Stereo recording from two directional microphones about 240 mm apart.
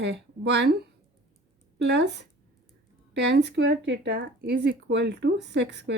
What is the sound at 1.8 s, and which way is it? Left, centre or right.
Speech, right.